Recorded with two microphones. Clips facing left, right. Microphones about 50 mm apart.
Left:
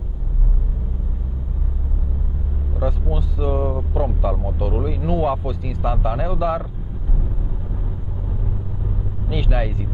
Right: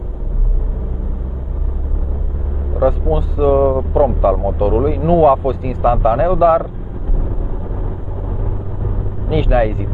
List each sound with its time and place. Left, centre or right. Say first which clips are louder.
2.7 s speech: right 10 dB; centre
8.8 s vehicle: right 7 dB; centre